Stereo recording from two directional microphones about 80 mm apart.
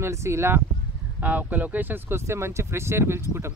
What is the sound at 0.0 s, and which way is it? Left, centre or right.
Speech, right.